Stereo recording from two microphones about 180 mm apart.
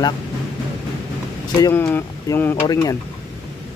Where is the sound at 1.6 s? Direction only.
15° left (ahead or behind).